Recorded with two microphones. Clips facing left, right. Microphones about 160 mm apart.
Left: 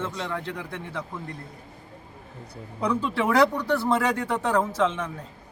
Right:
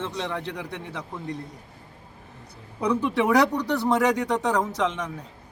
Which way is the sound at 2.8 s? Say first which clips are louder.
Right 2 dB; 15° right (ahead or behind).